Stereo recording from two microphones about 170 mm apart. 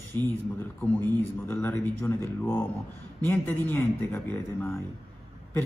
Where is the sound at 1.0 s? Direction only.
15° left (ahead or behind).